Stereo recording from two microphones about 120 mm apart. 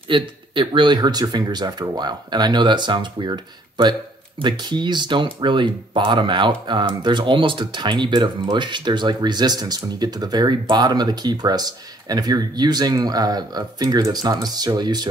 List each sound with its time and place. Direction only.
0.1 s speech: 45° right (ahead or behind)